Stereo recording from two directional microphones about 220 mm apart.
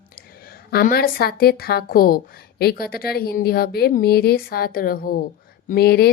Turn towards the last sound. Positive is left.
turn(degrees=45)  # may be behind; listen again after turning